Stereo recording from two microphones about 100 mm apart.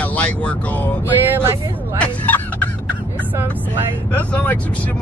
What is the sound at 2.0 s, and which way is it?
Speech, 15° left (ahead or behind).